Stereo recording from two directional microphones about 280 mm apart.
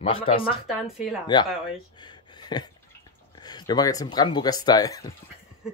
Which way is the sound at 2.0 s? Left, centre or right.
Centre.